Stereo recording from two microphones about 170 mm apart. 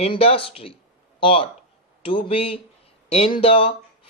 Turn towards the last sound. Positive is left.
turn(degrees=35)  # may be behind; listen again after turning